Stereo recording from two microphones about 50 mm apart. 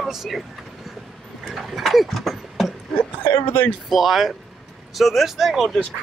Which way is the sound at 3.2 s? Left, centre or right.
Left.